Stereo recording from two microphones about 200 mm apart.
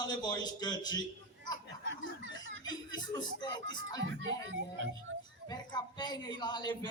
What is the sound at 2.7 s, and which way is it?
A man's voice, 20° left (ahead or behind).